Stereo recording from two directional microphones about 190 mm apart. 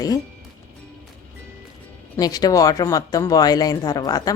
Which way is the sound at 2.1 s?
20° left (ahead or behind).